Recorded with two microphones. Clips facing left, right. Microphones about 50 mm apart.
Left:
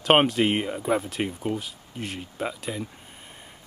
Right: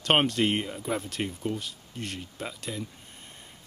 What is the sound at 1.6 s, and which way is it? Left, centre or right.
Speech, centre.